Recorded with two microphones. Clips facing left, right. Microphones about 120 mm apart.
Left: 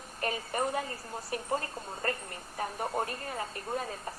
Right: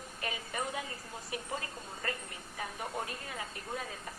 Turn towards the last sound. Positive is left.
turn(degrees=45)  # may be behind; listen again after turning